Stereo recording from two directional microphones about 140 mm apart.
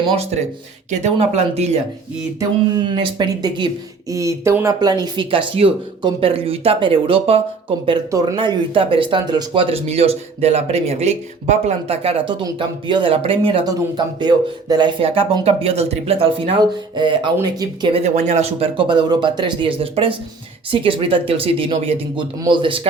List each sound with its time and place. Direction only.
0.9 s speech: 55° right (ahead or behind)
2.9 s speech: 35° right (ahead or behind)
4.1 s speech: 20° right (ahead or behind); by 7.8 s 40° right (ahead or behind)
8.1 s speech: 25° right (ahead or behind)
8.4 s speech: 40° right (ahead or behind)
15.4 s speech: 45° right (ahead or behind); by 17.9 s 30° right (ahead or behind)
17.9 s speech: 55° right (ahead or behind)
18.8 s speech: 35° right (ahead or behind)